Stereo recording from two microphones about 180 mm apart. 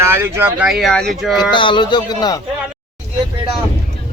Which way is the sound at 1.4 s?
25° left (ahead or behind).